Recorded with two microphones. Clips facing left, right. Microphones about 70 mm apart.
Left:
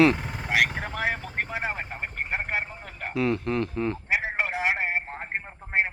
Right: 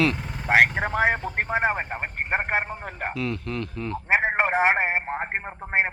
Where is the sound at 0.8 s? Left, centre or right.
Right.